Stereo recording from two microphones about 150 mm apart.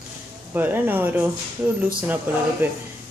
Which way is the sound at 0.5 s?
15° right (ahead or behind).